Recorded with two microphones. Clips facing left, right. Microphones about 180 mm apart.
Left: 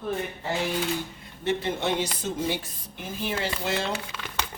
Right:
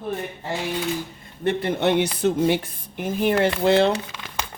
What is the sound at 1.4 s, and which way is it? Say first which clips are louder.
A man's voice: right 5 dB; 60° right (ahead or behind).